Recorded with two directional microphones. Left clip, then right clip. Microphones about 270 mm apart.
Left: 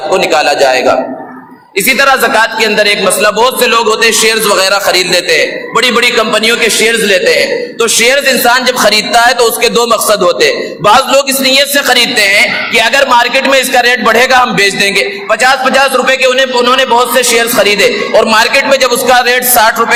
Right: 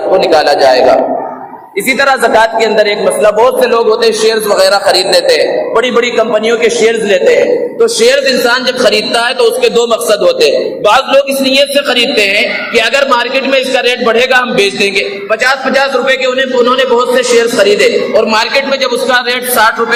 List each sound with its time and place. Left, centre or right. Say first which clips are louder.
0.2 s a man's voice: even; left
1.9 s a man's voice: left 1 dB; left